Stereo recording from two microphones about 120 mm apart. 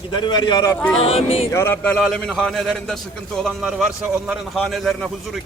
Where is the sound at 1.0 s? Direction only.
55° left (ahead or behind).